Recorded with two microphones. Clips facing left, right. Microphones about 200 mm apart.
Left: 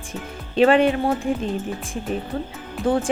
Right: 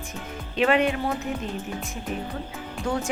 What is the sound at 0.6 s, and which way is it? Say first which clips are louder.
Speech: left 6 dB; 30° left (ahead or behind).